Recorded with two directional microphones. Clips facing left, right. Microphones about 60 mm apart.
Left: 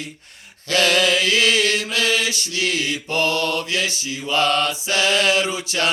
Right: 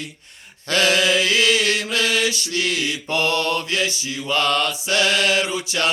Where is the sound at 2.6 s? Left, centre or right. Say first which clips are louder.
Left 3 dB; left.